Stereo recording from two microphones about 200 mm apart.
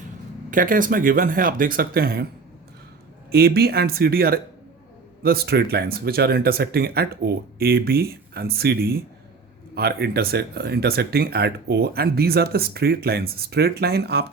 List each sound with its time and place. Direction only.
0.5 s speech: 45° right (ahead or behind)
3.3 s speech: 50° right (ahead or behind)